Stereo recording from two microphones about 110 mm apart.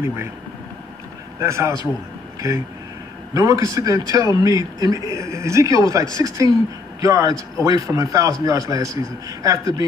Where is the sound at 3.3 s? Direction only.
30° right (ahead or behind).